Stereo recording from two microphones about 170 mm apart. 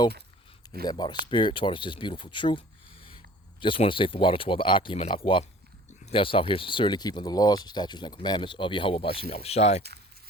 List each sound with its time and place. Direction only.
0.9 s speech: 25° left (ahead or behind)